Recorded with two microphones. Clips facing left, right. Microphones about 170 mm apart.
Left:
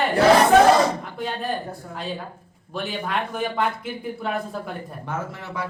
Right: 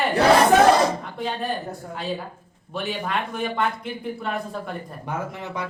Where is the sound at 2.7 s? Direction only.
Centre (ahead or behind).